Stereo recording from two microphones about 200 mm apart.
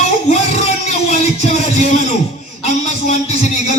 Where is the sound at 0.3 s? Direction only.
35° left (ahead or behind).